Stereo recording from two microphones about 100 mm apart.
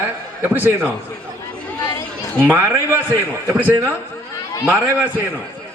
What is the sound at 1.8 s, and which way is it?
Chatter, 40° left (ahead or behind).